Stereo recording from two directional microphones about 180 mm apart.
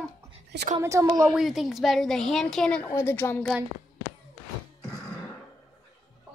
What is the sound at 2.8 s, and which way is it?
Speech, 15° left (ahead or behind).